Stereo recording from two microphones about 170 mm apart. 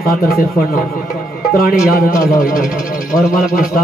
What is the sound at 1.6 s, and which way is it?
A man's voice, 60° left (ahead or behind).